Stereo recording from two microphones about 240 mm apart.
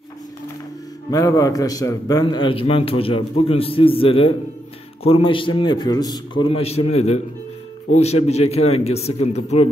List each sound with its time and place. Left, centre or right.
1.1 s a man's voice: centre